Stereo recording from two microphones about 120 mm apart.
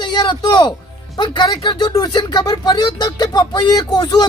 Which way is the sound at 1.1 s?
35° left (ahead or behind).